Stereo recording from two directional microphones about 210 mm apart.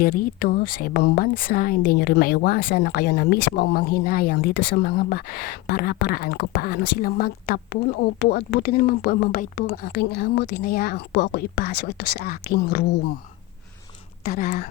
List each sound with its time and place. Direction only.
0.0 s speech: 45° left (ahead or behind)
14.3 s speech: 45° left (ahead or behind)